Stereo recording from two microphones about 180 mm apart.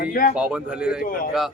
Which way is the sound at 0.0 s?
55° left (ahead or behind).